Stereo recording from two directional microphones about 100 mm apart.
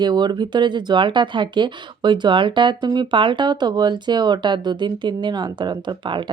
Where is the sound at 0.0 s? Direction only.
50° right (ahead or behind).